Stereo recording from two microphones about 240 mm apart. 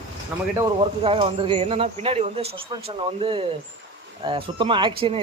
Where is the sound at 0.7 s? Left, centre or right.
Right.